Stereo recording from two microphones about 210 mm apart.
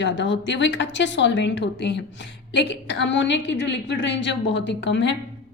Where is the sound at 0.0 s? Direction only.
60° left (ahead or behind).